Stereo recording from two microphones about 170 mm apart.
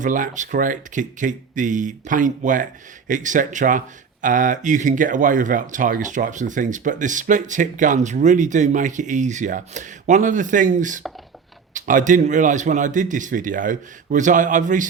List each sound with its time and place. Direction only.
0.0 s speech: 50° right (ahead or behind)